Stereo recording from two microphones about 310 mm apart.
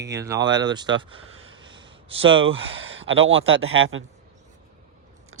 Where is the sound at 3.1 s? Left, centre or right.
Right.